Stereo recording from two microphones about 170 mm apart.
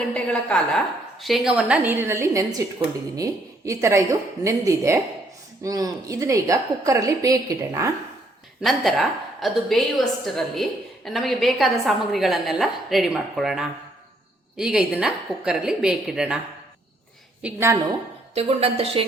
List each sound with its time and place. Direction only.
0.1 s a woman's voice: 5° left (ahead or behind); by 7.9 s 20° right (ahead or behind)
8.6 s a woman's voice: centre (ahead or behind)
17.4 s a woman's voice: 15° right (ahead or behind)
18.3 s speech: 35° right (ahead or behind)